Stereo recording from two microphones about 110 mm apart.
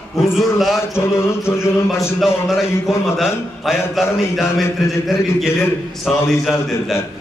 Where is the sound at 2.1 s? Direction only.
Centre (ahead or behind).